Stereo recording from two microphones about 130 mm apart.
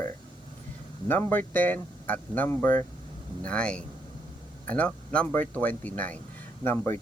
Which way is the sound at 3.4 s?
10° left (ahead or behind).